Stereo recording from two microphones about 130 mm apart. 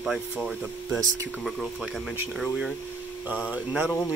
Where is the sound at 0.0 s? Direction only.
5° right (ahead or behind).